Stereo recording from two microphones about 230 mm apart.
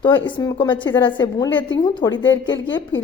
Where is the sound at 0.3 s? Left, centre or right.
Centre.